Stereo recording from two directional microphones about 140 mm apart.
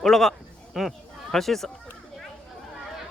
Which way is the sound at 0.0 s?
Centre (ahead or behind).